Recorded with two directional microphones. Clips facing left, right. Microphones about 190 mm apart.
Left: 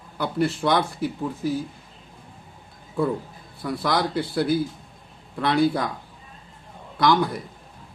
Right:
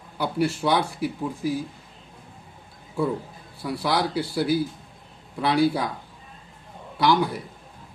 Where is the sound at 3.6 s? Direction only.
10° right (ahead or behind).